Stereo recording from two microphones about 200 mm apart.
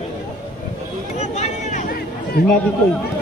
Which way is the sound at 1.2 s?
35° left (ahead or behind).